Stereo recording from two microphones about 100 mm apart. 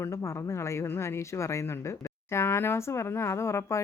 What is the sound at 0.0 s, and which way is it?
Speech, 30° left (ahead or behind).